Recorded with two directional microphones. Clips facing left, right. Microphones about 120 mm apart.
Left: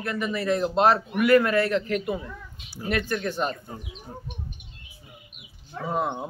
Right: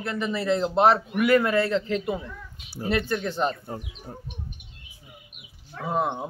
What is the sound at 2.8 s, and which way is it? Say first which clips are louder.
Speech: right 2 dB; 35° right (ahead or behind).